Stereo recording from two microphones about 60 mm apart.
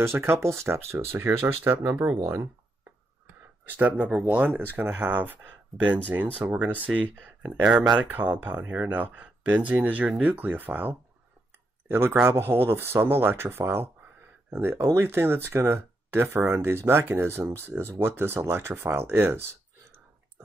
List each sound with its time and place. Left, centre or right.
0.0 s speech: right
3.6 s speech: right
6.5 s speech: right
7.6 s speech: centre
8.1 s speech: right